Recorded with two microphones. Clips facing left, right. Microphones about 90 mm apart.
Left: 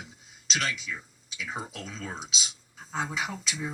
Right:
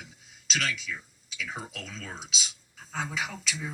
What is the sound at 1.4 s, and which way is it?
Speech, 35° left (ahead or behind).